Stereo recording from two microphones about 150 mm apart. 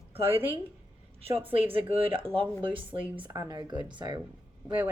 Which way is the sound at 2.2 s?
35° right (ahead or behind).